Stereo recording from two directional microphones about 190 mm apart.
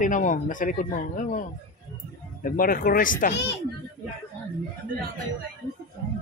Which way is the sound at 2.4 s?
50° left (ahead or behind).